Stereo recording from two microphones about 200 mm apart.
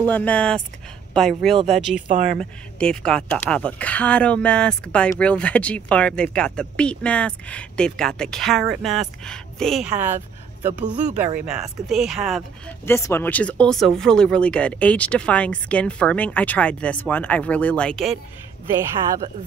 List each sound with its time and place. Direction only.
0.0 s speech: 5° left (ahead or behind)
2.0 s speech: 35° right (ahead or behind)
2.3 s a man's voice: 5° left (ahead or behind)
12.8 s speech: 10° left (ahead or behind)